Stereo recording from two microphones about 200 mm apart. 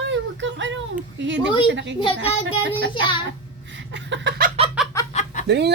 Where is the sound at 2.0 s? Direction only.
25° left (ahead or behind).